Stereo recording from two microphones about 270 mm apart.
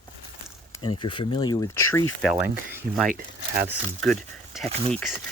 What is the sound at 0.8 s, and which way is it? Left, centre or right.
Speech, centre.